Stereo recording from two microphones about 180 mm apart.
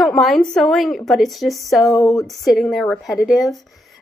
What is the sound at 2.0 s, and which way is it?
Speech, 15° left (ahead or behind).